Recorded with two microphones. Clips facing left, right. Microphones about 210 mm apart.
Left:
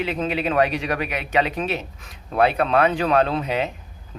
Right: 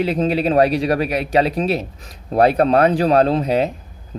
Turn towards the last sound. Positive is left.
turn(degrees=-35)  # may be behind; listen again after turning